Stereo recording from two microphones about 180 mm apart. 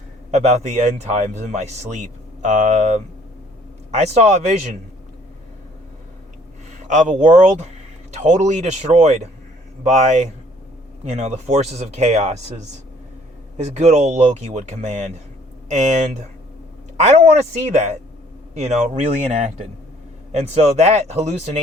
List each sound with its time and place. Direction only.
0.3 s a man's voice: 40° right (ahead or behind)
6.8 s a man's voice: 45° right (ahead or behind)
13.6 s a man's voice: 40° right (ahead or behind)